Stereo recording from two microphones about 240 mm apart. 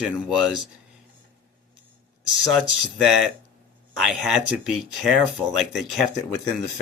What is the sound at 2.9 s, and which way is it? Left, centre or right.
Speech, centre.